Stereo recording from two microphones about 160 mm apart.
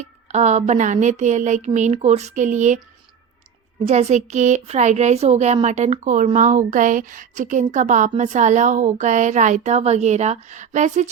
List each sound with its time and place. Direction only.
0.0 s a woman's voice: 45° right (ahead or behind)
3.8 s a woman's voice: 45° right (ahead or behind)